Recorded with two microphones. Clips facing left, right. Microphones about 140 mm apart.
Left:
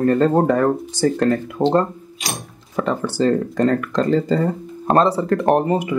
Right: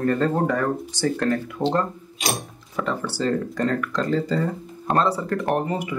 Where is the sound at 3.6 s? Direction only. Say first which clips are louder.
Left 7 dB; 45° left (ahead or behind).